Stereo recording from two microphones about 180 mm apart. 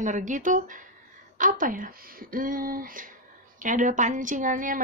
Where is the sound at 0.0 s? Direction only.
45° right (ahead or behind).